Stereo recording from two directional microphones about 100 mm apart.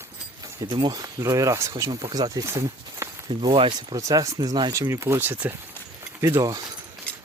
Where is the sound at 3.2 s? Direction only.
55° right (ahead or behind).